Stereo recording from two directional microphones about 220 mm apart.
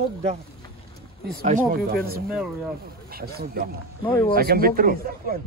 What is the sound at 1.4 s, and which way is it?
Speech, 40° right (ahead or behind).